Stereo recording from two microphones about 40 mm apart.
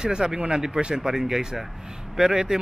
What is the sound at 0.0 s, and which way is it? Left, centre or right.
Speech, centre.